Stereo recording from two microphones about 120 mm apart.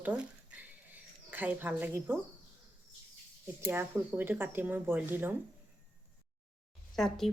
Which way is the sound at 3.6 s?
20° right (ahead or behind).